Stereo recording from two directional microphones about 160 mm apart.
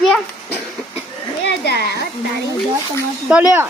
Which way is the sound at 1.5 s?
90° left.